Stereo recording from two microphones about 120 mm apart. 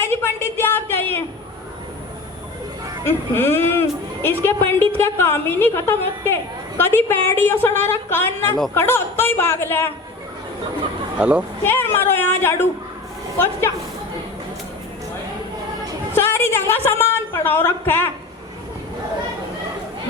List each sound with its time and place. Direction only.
0.0 s a sound: 20° left (ahead or behind)
3.0 s a woman's voice: 20° left (ahead or behind)
11.2 s speech: 10° right (ahead or behind)
11.6 s a woman's voice: 20° left (ahead or behind)
16.1 s a woman's voice: 20° left (ahead or behind)